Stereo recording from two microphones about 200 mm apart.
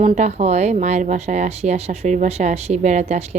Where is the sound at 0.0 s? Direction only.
35° right (ahead or behind).